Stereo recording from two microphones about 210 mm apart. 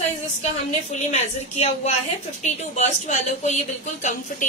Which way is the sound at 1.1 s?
30° left (ahead or behind).